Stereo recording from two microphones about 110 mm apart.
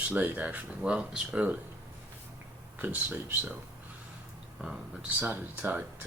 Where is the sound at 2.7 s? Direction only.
20° right (ahead or behind).